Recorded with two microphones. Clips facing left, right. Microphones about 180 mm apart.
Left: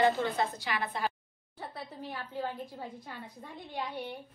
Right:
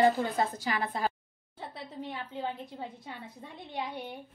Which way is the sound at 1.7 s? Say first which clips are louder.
Right 2 dB; 20° right (ahead or behind).